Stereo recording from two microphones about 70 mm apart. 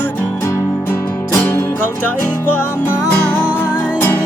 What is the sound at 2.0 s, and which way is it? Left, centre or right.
Music, left.